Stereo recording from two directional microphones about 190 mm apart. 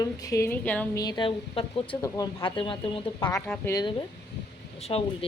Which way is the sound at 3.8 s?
25° left (ahead or behind).